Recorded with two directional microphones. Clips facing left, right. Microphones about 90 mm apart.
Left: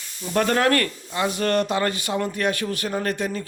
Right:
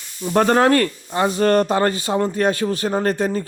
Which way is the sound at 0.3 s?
30° right (ahead or behind).